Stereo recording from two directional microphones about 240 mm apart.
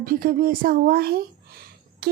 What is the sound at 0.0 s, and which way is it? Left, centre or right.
Speech, right.